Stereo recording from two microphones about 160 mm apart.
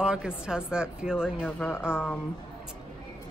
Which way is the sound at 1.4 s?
10° left (ahead or behind).